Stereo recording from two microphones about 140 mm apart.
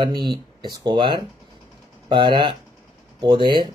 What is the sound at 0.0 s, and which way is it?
Speech, 30° right (ahead or behind).